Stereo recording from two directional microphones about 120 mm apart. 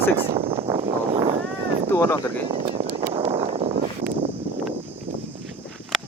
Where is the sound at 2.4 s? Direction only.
60° right (ahead or behind).